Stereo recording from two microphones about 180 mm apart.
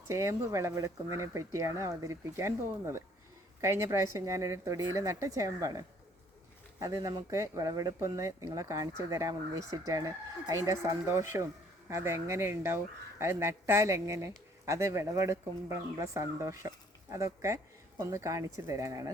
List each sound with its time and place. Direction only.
0.1 s speech: 15° right (ahead or behind)